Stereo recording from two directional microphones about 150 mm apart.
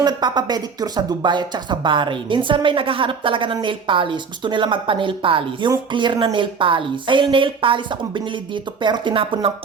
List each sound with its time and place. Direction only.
0.0 s speech: 30° right (ahead or behind)